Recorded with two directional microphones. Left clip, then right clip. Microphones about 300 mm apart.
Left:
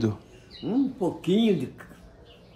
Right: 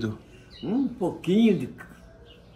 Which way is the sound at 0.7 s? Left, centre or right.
Centre.